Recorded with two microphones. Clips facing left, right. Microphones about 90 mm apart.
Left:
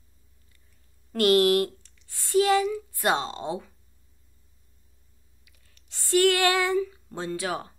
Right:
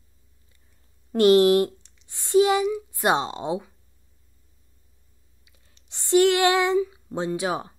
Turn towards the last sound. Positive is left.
turn(degrees=-20)  # may be behind; listen again after turning